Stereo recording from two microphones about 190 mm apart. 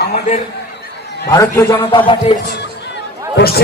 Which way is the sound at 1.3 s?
15° left (ahead or behind).